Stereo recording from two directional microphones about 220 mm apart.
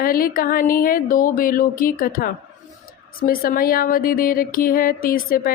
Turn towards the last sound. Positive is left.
turn(degrees=40)  # may be behind; listen again after turning